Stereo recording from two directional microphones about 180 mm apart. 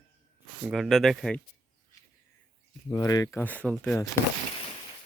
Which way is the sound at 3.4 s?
5° left (ahead or behind).